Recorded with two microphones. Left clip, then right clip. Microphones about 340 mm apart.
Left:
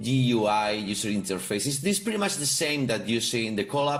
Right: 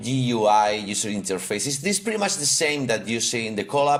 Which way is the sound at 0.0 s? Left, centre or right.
Centre.